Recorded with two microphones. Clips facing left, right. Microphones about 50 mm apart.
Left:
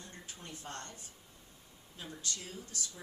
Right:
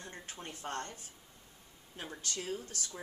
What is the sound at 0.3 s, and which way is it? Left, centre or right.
Speech, right.